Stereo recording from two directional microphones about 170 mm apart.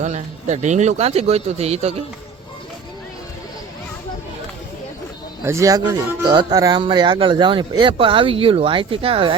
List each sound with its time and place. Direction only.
0.0 s speech: 45° right (ahead or behind)
5.4 s speech: 15° right (ahead or behind); by 9.3 s 35° right (ahead or behind)